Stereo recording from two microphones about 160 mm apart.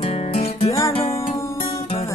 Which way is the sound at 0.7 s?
20° left (ahead or behind).